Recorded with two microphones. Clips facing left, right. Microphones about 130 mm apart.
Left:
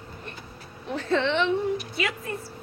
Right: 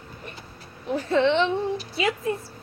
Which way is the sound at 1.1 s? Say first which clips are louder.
Right 3 dB; 20° right (ahead or behind).